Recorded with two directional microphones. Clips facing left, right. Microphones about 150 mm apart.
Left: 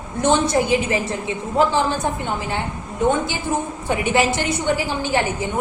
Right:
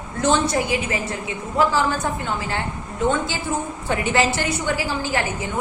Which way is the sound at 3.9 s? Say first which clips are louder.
Left 2 dB; 15° left (ahead or behind).